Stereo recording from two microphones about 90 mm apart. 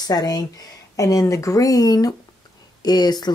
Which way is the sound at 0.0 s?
45° left (ahead or behind).